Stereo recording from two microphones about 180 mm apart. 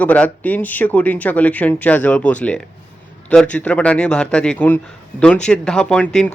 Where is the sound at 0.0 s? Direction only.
10° left (ahead or behind).